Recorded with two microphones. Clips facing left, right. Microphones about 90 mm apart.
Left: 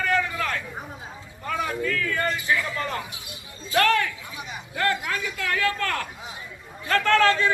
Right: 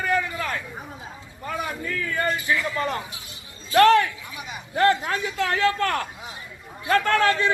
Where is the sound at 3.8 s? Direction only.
25° right (ahead or behind).